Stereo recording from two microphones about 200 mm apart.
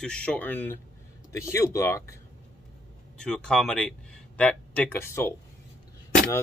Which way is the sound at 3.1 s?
5° left (ahead or behind).